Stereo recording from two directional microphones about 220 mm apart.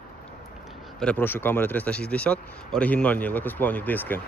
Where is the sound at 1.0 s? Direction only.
5° left (ahead or behind).